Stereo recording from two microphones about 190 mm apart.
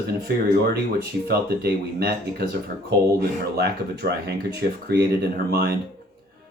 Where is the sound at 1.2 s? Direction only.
55° right (ahead or behind).